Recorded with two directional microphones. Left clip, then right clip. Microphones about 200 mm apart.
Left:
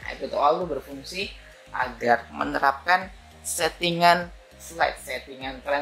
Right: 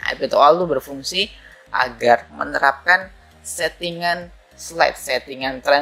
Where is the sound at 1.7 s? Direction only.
20° right (ahead or behind).